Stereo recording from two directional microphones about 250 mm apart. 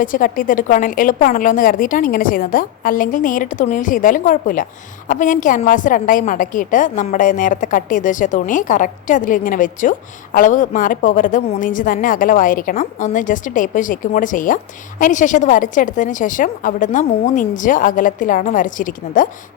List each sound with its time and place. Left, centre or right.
0.0 s a woman's voice: left